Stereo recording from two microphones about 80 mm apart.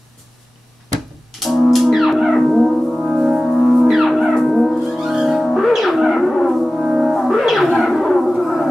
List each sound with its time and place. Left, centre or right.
1.4 s music: centre